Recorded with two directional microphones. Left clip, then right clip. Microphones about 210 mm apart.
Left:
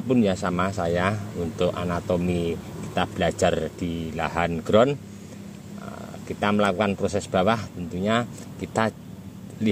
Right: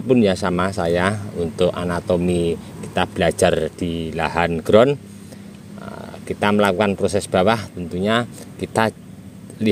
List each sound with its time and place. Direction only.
0.1 s speech: 45° right (ahead or behind)